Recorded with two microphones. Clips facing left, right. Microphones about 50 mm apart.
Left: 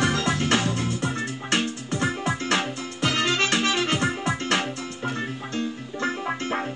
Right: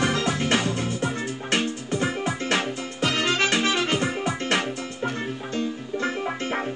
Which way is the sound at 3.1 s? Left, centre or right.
Right.